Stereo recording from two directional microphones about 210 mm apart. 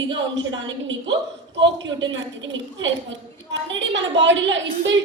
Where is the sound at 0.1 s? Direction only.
60° right (ahead or behind).